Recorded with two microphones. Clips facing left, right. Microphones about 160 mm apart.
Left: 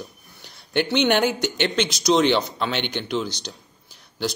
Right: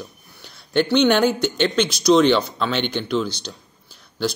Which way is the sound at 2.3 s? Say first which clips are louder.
Right 3 dB; 15° left (ahead or behind).